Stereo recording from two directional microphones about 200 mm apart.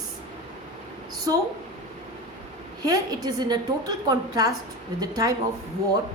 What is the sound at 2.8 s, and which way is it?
A woman's voice, 20° right (ahead or behind).